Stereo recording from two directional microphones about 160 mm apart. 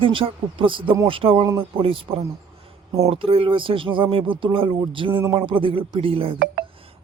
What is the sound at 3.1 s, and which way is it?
A man's voice, 35° right (ahead or behind).